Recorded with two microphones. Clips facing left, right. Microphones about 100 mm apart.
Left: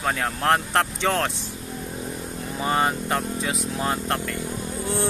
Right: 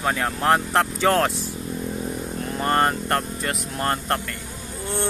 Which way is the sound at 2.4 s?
5° left (ahead or behind).